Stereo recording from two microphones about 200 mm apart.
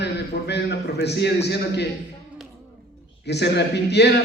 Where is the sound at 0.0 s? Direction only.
55° left (ahead or behind).